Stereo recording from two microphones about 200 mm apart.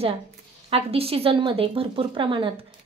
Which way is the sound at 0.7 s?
30° right (ahead or behind).